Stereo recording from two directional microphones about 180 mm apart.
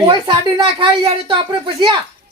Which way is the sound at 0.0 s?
25° right (ahead or behind).